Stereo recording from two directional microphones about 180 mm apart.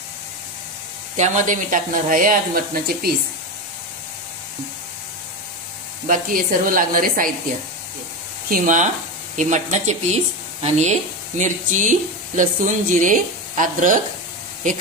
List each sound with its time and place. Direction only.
1.1 s speech: 40° right (ahead or behind)
6.0 s speech: 50° right (ahead or behind)
8.5 s speech: 50° right (ahead or behind)